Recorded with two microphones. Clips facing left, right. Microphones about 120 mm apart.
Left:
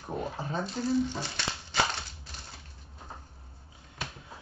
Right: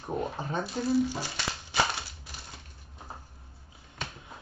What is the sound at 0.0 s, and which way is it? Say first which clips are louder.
Speech: right 2 dB; 15° right (ahead or behind).